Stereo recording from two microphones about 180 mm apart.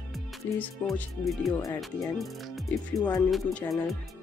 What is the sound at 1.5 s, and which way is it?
Speech, 15° left (ahead or behind).